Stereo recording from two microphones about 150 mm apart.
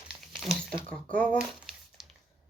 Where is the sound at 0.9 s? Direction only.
10° left (ahead or behind).